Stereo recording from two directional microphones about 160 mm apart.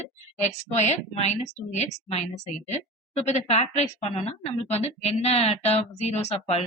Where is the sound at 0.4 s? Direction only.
45° left (ahead or behind).